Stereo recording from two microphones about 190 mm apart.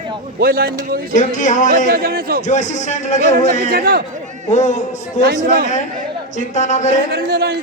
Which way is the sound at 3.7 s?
55° right (ahead or behind).